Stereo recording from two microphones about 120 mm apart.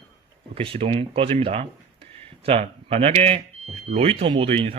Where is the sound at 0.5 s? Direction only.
50° right (ahead or behind).